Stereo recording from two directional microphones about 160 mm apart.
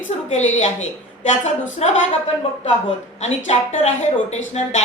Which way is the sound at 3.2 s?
45° left (ahead or behind).